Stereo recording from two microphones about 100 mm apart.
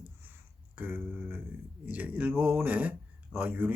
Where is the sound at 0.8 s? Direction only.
20° right (ahead or behind).